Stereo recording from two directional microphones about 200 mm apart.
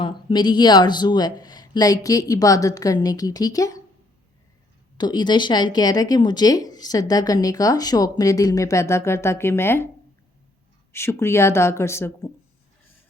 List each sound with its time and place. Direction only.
0.0 s speech: 25° left (ahead or behind)
4.9 s speech: 20° left (ahead or behind)
10.9 s speech: 15° left (ahead or behind)